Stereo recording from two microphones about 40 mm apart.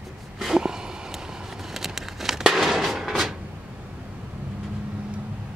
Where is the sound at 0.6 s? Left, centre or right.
Centre.